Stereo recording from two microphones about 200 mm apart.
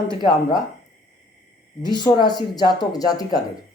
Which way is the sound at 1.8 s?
20° left (ahead or behind).